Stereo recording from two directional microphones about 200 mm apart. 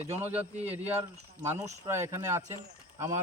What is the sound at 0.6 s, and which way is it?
A man's voice, 10° right (ahead or behind).